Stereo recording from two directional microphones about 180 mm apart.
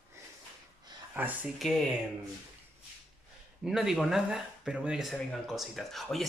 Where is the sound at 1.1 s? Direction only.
10° right (ahead or behind).